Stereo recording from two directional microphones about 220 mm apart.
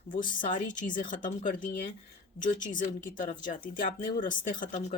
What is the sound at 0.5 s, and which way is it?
Speech, 35° left (ahead or behind).